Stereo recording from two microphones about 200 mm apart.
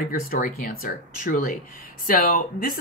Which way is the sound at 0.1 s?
45° left (ahead or behind).